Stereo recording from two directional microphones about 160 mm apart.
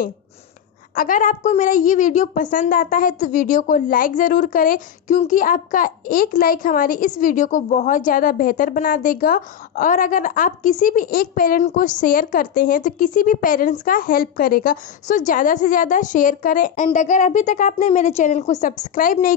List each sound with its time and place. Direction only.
0.9 s a woman's voice: 55° left (ahead or behind)